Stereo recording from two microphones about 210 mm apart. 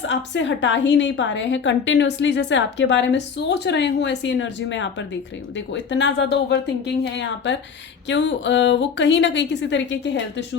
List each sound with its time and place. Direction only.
0.1 s a woman's voice: 60° left (ahead or behind)